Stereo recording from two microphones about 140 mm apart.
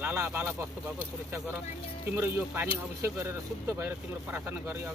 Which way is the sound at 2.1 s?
20° right (ahead or behind).